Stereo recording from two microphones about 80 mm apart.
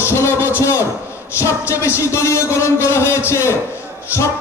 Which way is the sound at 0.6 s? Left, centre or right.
Left.